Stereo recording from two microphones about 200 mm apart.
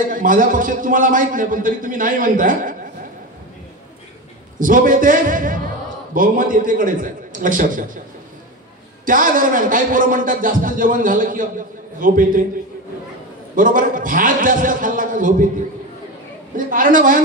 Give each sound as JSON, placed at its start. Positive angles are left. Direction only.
{"t": 0.1, "sound": "a man's voice", "side_deg": -40}
{"t": 4.6, "sound": "a man's voice", "side_deg": -40}
{"t": 9.0, "sound": "a man's voice", "side_deg": -40}
{"t": 13.6, "sound": "a man's voice", "side_deg": -40}
{"t": 16.5, "sound": "a man's voice", "side_deg": -40}